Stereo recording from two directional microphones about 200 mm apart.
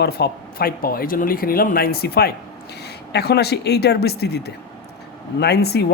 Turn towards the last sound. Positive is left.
turn(degrees=55)  # may be behind; listen again after turning